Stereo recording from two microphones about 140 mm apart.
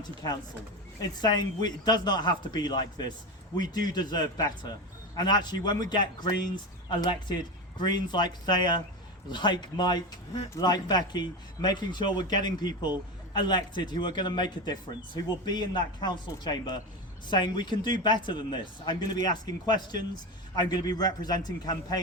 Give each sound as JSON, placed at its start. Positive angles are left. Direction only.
{"t": 1.2, "sound": "a man's voice", "side_deg": 30}